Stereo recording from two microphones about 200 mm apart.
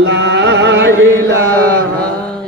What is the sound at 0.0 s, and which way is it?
Music, 70° right (ahead or behind).